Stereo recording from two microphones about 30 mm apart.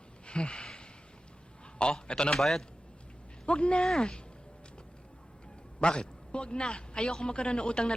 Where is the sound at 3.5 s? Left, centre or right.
Left.